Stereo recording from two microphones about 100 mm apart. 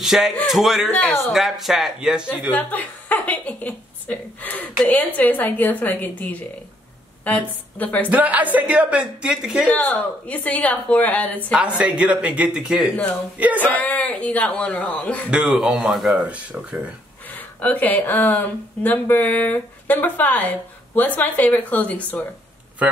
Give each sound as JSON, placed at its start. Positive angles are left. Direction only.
{"t": 0.0, "sound": "speech", "side_deg": -5}
{"t": 0.8, "sound": "speech", "side_deg": 15}
{"t": 1.2, "sound": "speech", "side_deg": 0}
{"t": 2.5, "sound": "speech", "side_deg": 15}
{"t": 8.1, "sound": "speech", "side_deg": -15}
{"t": 9.7, "sound": "speech", "side_deg": 15}
{"t": 12.0, "sound": "speech", "side_deg": -15}
{"t": 13.6, "sound": "speech", "side_deg": 15}
{"t": 15.3, "sound": "speech", "side_deg": -5}
{"t": 17.3, "sound": "speech", "side_deg": 15}